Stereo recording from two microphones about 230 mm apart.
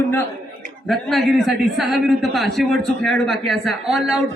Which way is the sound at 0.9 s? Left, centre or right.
Centre.